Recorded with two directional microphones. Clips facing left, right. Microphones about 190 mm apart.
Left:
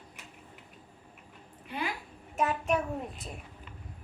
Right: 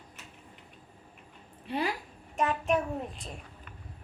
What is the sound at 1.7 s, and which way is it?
Speech, 35° right (ahead or behind).